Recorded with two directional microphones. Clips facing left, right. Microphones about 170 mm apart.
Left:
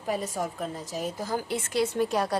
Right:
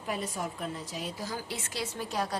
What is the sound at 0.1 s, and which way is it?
A woman's voice, 45° left (ahead or behind).